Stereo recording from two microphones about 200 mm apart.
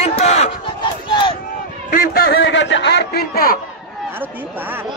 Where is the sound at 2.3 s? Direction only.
65° left (ahead or behind); by 3.6 s 50° left (ahead or behind).